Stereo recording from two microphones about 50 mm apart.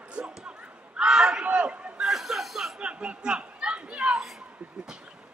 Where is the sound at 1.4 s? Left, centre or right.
Right.